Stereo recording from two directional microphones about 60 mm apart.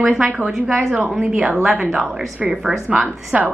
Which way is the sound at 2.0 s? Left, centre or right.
Right.